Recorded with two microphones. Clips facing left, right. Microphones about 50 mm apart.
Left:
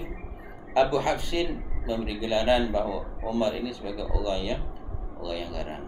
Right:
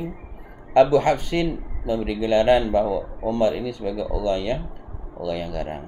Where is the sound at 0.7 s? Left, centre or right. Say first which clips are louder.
Right 7 dB; right.